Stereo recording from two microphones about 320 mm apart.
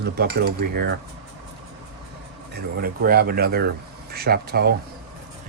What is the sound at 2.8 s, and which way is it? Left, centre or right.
Speech, right.